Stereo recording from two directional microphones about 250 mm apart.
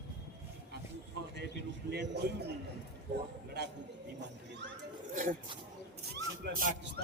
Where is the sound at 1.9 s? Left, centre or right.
Right.